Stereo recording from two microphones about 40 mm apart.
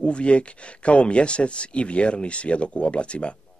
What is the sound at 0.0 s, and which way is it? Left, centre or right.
Speech, left.